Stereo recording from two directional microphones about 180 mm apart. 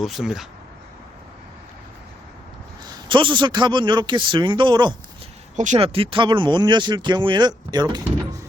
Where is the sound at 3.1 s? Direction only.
25° right (ahead or behind).